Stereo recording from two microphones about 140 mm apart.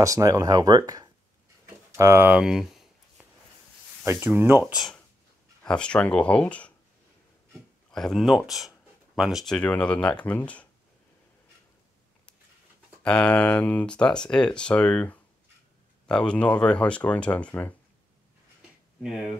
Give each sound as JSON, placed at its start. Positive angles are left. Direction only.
{"t": 0.0, "sound": "speech", "side_deg": -25}
{"t": 2.0, "sound": "a sound", "side_deg": -15}
{"t": 4.0, "sound": "speech", "side_deg": -15}
{"t": 4.7, "sound": "speech", "side_deg": 0}
{"t": 7.9, "sound": "speech", "side_deg": 0}
{"t": 13.0, "sound": "speech", "side_deg": 10}